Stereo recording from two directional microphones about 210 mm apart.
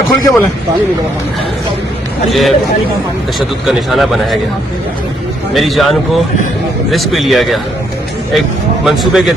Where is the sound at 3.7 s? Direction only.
Centre (ahead or behind).